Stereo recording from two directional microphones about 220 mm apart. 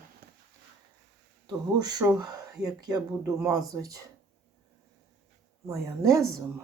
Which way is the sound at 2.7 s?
15° right (ahead or behind).